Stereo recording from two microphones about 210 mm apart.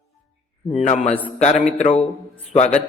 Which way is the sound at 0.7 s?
35° left (ahead or behind).